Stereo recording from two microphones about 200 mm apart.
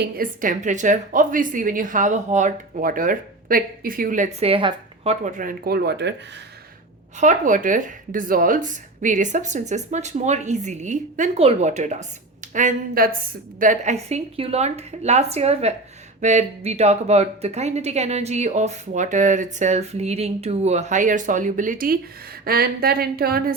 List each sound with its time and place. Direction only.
0.0 s speech: 45° right (ahead or behind); by 6.4 s 60° right (ahead or behind)
7.2 s speech: 40° right (ahead or behind)